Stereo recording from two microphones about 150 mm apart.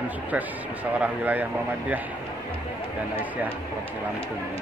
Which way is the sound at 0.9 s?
10° right (ahead or behind).